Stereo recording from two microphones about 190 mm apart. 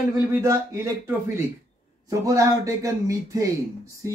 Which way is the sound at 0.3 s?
15° right (ahead or behind).